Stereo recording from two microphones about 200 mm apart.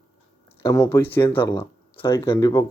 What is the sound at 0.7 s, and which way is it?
Speech, 15° left (ahead or behind).